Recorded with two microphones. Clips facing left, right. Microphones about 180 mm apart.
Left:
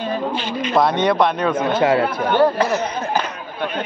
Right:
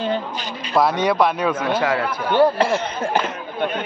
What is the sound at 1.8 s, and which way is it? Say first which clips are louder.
Speech: left 4 dB; 25° left (ahead or behind).